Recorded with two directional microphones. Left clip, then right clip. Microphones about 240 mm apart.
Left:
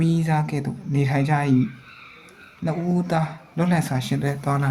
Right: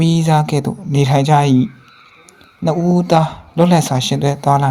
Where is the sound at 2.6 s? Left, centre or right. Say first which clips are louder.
Right 10 dB; right.